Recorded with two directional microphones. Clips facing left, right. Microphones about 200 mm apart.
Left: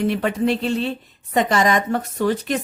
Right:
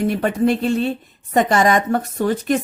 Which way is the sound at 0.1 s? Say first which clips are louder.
Right 2 dB; 50° right (ahead or behind).